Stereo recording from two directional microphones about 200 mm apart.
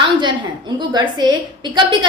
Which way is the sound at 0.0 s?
25° right (ahead or behind).